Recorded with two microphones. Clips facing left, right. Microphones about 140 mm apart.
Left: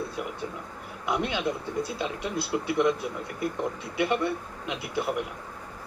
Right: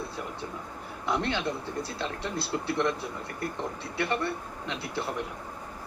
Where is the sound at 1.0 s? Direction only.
15° left (ahead or behind).